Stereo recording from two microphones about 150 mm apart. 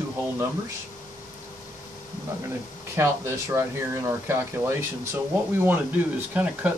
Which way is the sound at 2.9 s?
20° right (ahead or behind).